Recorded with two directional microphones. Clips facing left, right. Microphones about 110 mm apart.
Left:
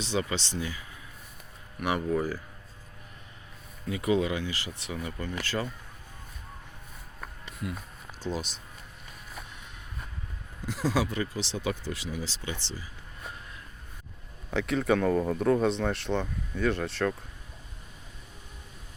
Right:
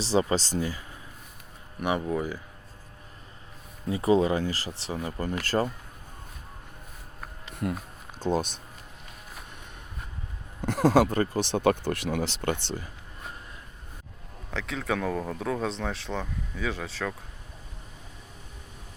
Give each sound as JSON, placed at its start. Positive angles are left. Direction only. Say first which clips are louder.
{"t": 0.0, "sound": "speech", "louder": "right 6 dB", "side_deg": -35}
{"t": 1.8, "sound": "speech", "louder": "even", "side_deg": -25}
{"t": 3.8, "sound": "speech", "louder": "right 4 dB", "side_deg": -35}
{"t": 7.5, "sound": "a sound", "louder": "right 7 dB", "side_deg": -50}
{"t": 8.2, "sound": "speech", "louder": "right 7 dB", "side_deg": -50}
{"t": 10.6, "sound": "speech", "louder": "right 7 dB", "side_deg": -60}
{"t": 14.5, "sound": "speech", "louder": "left 5 dB", "side_deg": 0}